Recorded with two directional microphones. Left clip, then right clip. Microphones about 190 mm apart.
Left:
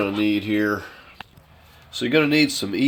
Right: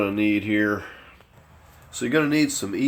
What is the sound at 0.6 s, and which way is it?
Speech, 5° left (ahead or behind).